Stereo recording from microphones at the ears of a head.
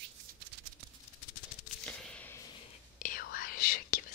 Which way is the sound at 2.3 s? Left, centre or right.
Left.